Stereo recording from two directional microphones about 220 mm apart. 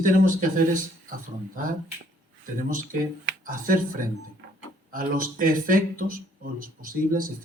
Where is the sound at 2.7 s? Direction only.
40° right (ahead or behind).